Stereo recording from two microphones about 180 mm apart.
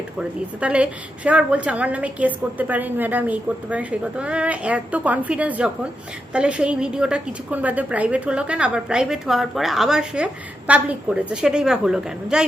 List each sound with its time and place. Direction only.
0.2 s a woman's voice: 5° right (ahead or behind)